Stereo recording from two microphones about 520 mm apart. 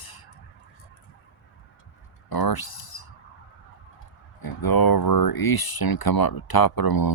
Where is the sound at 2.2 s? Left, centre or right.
Left.